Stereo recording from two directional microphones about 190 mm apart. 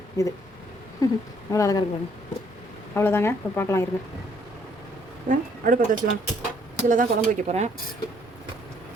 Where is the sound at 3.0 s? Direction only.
15° left (ahead or behind).